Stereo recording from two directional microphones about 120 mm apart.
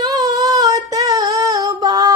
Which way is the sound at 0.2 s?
30° right (ahead or behind).